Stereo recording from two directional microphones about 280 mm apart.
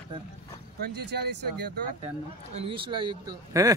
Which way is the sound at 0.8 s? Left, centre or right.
Right.